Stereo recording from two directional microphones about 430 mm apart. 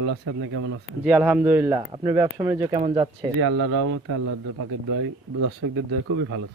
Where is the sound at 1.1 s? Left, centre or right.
Centre.